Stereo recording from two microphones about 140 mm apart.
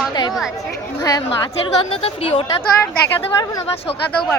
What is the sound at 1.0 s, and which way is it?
A woman's voice, 30° left (ahead or behind).